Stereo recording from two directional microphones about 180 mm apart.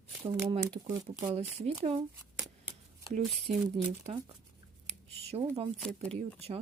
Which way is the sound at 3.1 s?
35° right (ahead or behind).